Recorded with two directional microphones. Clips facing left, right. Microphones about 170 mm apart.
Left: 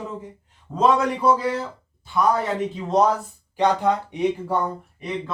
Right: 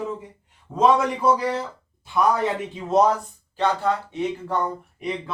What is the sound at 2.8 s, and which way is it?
Speech, 5° right (ahead or behind).